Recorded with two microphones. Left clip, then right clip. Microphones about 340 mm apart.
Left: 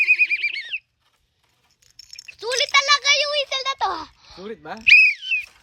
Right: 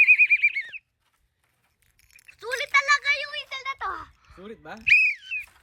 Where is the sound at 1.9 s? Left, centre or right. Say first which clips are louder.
Left 10 dB; centre; by 4.8 s left.